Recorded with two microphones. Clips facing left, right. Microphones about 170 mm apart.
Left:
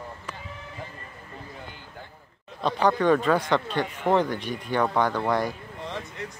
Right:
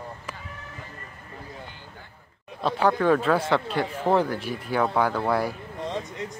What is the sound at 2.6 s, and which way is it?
Speech, 5° right (ahead or behind).